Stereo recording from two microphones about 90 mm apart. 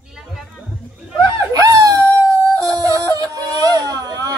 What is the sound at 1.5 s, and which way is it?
Wail, 40° right (ahead or behind).